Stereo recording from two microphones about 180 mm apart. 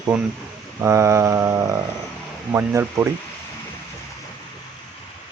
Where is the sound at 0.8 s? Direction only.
15° right (ahead or behind).